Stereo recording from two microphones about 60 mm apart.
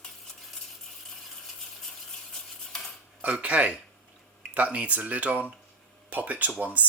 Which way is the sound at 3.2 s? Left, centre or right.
Right.